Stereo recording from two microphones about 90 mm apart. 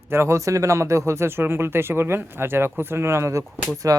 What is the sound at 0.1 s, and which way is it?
Speech, 30° right (ahead or behind).